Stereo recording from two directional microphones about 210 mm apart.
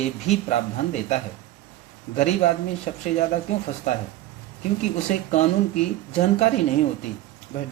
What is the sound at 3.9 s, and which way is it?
Speech, 35° left (ahead or behind).